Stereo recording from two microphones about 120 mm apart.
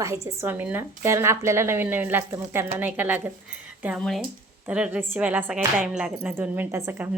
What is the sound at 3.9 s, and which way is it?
Speech, centre (ahead or behind).